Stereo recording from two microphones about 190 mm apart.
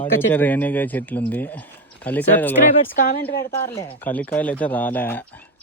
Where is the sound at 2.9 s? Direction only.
50° left (ahead or behind).